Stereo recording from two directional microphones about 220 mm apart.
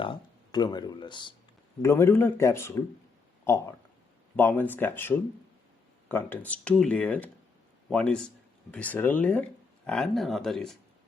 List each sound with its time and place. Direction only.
0.0 s speech: 20° left (ahead or behind); by 10.8 s centre (ahead or behind)